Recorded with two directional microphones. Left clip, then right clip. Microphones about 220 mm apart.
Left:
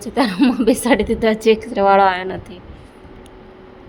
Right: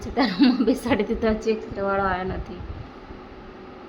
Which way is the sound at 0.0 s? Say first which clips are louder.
Left 4 dB; 20° left (ahead or behind).